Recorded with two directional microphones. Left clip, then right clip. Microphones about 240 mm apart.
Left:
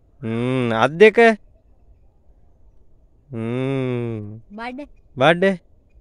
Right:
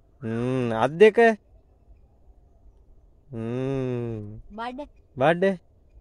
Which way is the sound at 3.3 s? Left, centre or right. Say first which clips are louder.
Left 5 dB; centre.